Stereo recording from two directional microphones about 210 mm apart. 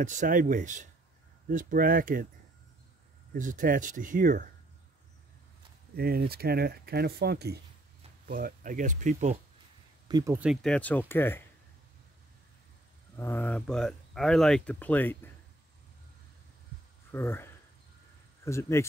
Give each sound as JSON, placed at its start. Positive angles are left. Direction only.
{"t": 0.0, "sound": "speech", "side_deg": -35}
{"t": 3.3, "sound": "speech", "side_deg": -40}
{"t": 5.9, "sound": "speech", "side_deg": -45}
{"t": 10.0, "sound": "speech", "side_deg": -15}
{"t": 10.4, "sound": "speech", "side_deg": 0}
{"t": 13.1, "sound": "speech", "side_deg": 10}
{"t": 17.1, "sound": "speech", "side_deg": 10}